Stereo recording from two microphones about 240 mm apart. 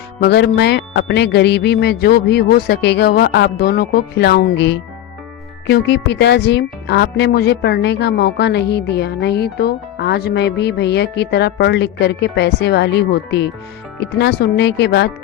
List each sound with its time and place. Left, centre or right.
0.2 s speech: left